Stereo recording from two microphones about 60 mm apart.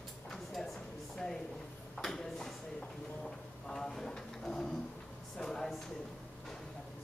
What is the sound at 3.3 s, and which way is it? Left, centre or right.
Drawer open or close, centre.